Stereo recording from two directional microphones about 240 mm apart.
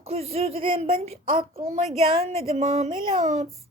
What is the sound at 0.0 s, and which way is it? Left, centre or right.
A woman's voice, right.